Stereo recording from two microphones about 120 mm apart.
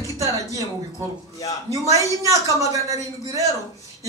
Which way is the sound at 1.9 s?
25° right (ahead or behind).